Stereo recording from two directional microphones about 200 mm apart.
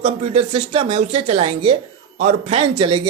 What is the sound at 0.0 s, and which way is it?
Speech, 30° right (ahead or behind).